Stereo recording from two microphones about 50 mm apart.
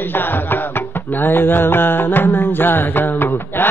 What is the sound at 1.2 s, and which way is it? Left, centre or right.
A man's voice, left.